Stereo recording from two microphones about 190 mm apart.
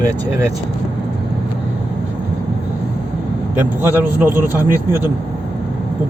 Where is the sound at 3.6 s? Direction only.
10° right (ahead or behind).